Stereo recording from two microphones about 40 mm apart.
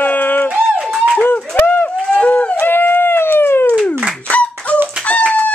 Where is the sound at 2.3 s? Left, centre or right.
Left.